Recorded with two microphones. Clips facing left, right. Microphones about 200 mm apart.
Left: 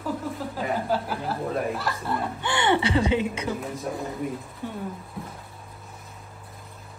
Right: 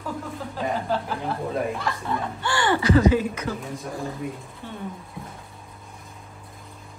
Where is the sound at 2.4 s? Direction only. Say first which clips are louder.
Right 1 dB; 20° left (ahead or behind).